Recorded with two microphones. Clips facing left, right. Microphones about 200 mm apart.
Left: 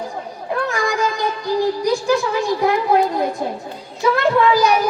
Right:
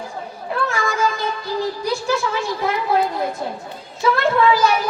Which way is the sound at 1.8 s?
15° left (ahead or behind).